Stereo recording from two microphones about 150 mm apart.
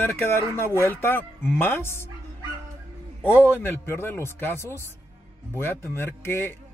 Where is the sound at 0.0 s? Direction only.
15° left (ahead or behind).